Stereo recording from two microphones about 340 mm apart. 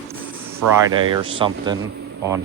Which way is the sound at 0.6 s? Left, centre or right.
Right.